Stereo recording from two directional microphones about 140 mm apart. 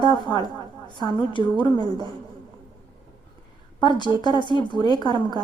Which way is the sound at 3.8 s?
30° left (ahead or behind).